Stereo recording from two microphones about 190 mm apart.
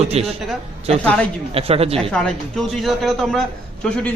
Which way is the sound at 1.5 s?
30° right (ahead or behind).